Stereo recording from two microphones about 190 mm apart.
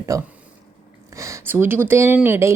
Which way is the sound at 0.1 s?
15° right (ahead or behind).